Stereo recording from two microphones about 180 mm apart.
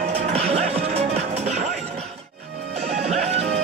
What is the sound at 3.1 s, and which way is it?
Music, 35° right (ahead or behind).